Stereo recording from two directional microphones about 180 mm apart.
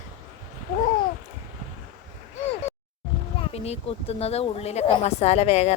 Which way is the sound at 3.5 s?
35° left (ahead or behind).